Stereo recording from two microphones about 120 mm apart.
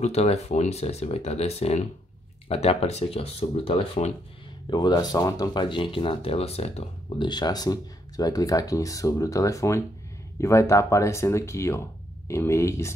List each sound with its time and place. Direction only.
0.0 s speech: 65° left (ahead or behind)
4.6 s speech: 35° left (ahead or behind); by 6.9 s 60° left (ahead or behind)
7.2 s speech: 35° left (ahead or behind)